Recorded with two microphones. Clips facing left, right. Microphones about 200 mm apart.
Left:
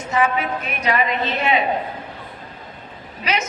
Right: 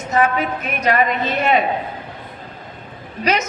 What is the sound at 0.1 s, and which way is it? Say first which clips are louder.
Speech: right 2 dB; 40° right (ahead or behind).